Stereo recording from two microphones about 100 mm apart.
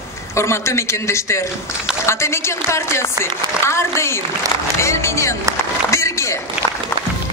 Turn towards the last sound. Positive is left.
turn(degrees=30)  # may be behind; listen again after turning